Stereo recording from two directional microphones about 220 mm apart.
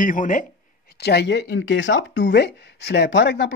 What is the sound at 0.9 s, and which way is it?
Speech, 50° left (ahead or behind).